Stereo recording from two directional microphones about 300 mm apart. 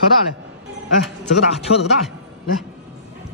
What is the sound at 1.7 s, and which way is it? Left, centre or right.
Speech, left.